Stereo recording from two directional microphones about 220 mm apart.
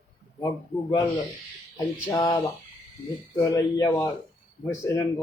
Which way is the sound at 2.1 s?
15° left (ahead or behind).